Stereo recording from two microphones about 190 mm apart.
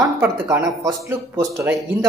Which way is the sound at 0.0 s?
10° right (ahead or behind).